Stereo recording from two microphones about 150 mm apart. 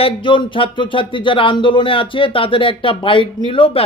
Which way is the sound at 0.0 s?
35° left (ahead or behind).